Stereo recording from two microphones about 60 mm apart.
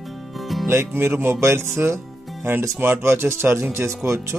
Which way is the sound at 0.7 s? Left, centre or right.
Right.